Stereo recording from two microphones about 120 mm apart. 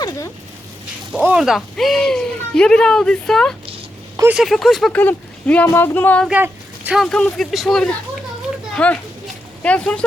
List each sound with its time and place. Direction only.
1.2 s speech: 10° right (ahead or behind)
4.9 s speech: 15° left (ahead or behind)
6.9 s speech: 5° left (ahead or behind)